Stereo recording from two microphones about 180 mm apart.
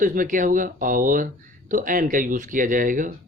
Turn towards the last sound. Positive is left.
turn(degrees=-50)  # may be behind; listen again after turning